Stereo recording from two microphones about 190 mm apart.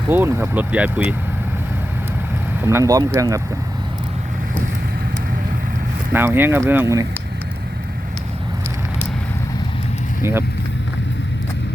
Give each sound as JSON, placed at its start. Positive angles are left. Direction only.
{"t": 0.1, "sound": "speech", "side_deg": -10}
{"t": 2.6, "sound": "speech", "side_deg": -15}
{"t": 6.1, "sound": "speech", "side_deg": -10}